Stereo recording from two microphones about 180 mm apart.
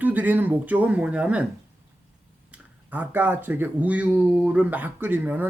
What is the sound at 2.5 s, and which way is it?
Speech, 10° right (ahead or behind).